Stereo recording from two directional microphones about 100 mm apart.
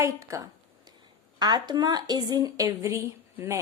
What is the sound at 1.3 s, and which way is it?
A woman's voice, 45° right (ahead or behind).